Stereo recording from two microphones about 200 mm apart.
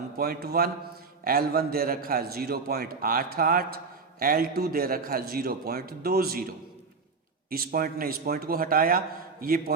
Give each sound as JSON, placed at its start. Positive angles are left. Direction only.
{"t": 0.2, "sound": "a man's voice", "side_deg": -50}
{"t": 7.5, "sound": "a man's voice", "side_deg": -50}